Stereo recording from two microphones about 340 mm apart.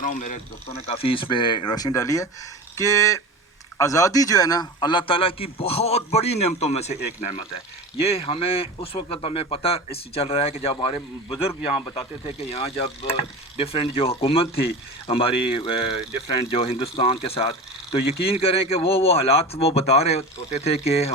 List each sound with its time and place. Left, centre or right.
0.0 s speech: left
15.9 s speech: right
16.4 s speech: centre